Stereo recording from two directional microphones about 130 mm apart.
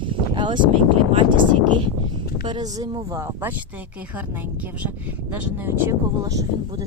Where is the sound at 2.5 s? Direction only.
30° right (ahead or behind).